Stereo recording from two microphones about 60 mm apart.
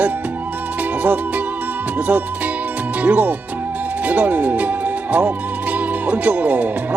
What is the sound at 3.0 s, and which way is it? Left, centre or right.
Speech, right.